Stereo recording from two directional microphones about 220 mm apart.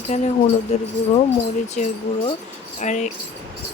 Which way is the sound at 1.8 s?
35° left (ahead or behind).